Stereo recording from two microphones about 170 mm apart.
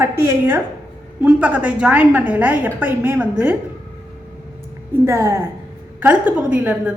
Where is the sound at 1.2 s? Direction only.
10° right (ahead or behind).